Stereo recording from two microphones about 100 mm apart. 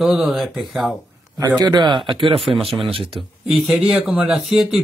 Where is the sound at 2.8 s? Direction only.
65° right (ahead or behind).